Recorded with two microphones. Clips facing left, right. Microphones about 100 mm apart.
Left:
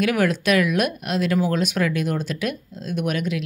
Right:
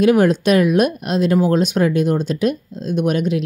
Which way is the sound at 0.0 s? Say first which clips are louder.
Right 7 dB; 30° right (ahead or behind).